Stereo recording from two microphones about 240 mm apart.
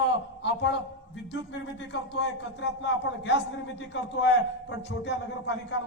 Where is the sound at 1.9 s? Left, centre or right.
Left.